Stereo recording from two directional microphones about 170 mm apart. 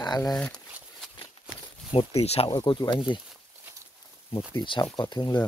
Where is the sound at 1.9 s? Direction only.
35° left (ahead or behind).